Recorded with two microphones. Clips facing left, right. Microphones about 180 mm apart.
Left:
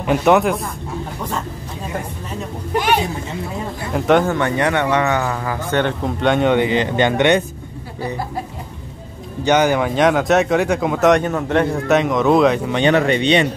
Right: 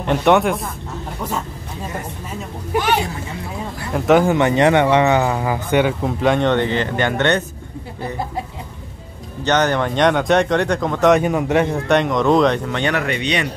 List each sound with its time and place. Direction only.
0.0 s speech: 5° left (ahead or behind)
3.9 s speech: centre (ahead or behind)
4.3 s speech: 20° right (ahead or behind); by 7.4 s 15° left (ahead or behind)
9.4 s speech: 10° left (ahead or behind)
11.2 s speech: 10° right (ahead or behind)
11.9 s speech: centre (ahead or behind)
12.6 s speech: 15° left (ahead or behind)
12.9 s speech: 30° left (ahead or behind)